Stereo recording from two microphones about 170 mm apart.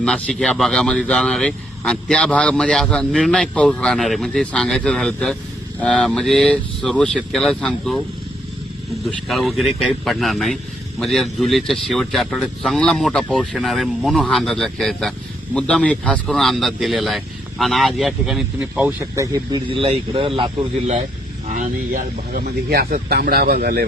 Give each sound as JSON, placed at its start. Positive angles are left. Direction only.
{"t": 0.0, "sound": "speech", "side_deg": 5}
{"t": 9.0, "sound": "speech", "side_deg": 0}
{"t": 21.5, "sound": "speech", "side_deg": -50}